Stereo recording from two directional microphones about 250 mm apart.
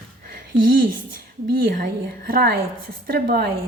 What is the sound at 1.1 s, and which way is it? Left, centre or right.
A woman's voice, right.